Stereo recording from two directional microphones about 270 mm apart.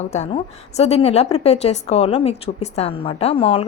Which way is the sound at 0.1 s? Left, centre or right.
Left.